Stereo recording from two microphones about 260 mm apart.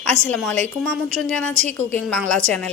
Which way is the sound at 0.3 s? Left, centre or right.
Centre.